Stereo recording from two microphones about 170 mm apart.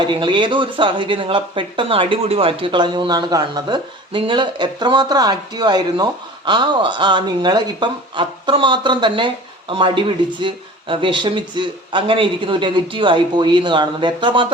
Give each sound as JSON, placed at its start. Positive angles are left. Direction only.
{"t": 0.0, "sound": "speech", "side_deg": -25}